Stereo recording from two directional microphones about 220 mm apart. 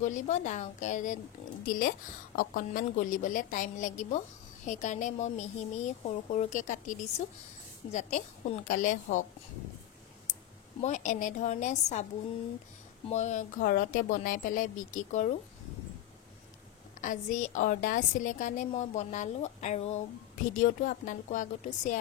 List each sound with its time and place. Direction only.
0.0 s a woman's voice: 35° left (ahead or behind)
10.8 s a woman's voice: 35° left (ahead or behind)
13.1 s a woman's voice: 35° left (ahead or behind)
17.0 s a woman's voice: 35° left (ahead or behind)